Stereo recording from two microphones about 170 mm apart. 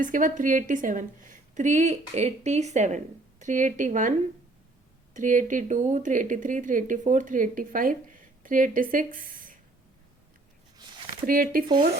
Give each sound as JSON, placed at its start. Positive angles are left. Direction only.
{"t": 0.0, "sound": "speech", "side_deg": -50}
{"t": 5.1, "sound": "speech", "side_deg": -50}
{"t": 11.3, "sound": "speech", "side_deg": -55}